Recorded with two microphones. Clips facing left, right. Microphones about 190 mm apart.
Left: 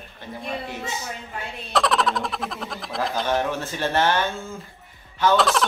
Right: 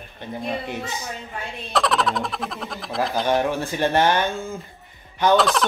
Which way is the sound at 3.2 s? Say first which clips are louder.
Right 3 dB; 10° right (ahead or behind).